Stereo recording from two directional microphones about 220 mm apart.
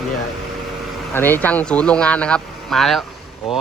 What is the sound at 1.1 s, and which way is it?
Speech, 10° left (ahead or behind).